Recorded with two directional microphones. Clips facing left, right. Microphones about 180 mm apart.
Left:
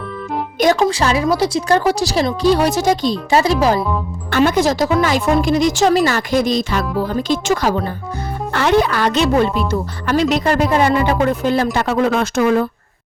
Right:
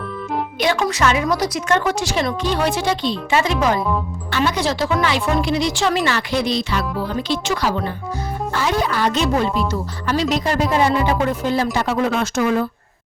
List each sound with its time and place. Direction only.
0.6 s a woman's voice: 40° left (ahead or behind)
4.3 s speech: 50° left (ahead or behind)
8.5 s speech: 65° left (ahead or behind)